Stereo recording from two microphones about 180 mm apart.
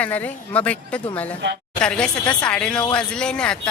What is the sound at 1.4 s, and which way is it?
Speech, 75° right (ahead or behind).